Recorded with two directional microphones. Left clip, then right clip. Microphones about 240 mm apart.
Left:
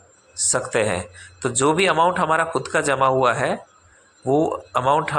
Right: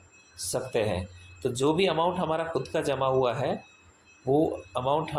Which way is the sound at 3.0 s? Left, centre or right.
Left.